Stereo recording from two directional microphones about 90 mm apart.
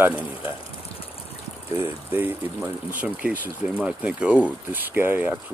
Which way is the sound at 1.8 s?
25° right (ahead or behind).